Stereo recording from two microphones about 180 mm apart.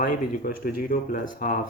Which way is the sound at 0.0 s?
50° left (ahead or behind).